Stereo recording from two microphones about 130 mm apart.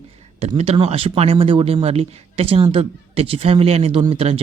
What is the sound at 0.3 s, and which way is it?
Speech, 55° right (ahead or behind).